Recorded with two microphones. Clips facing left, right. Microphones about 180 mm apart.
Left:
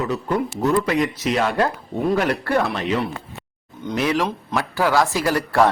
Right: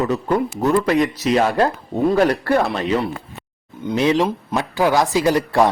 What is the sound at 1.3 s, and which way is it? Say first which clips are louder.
Speech: right 4 dB; 35° right (ahead or behind).